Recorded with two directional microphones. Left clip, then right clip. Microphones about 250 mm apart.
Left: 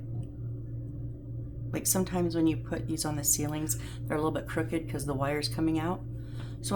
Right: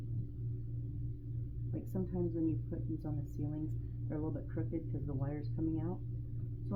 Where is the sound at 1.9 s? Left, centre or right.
Left.